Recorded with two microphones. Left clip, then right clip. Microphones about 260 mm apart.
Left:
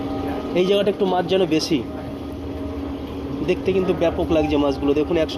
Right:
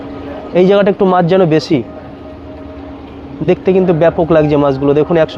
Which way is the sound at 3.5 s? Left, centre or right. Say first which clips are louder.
Right 10 dB; right.